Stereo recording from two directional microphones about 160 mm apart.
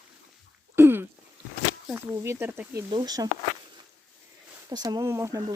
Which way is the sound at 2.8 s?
25° right (ahead or behind).